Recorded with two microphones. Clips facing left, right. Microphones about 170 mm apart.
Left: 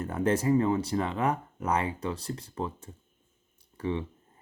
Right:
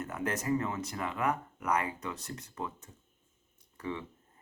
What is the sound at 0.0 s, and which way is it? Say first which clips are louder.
Speech: left 8 dB; 30° left (ahead or behind).